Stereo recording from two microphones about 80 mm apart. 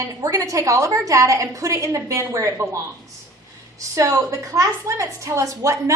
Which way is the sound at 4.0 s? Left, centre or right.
Right.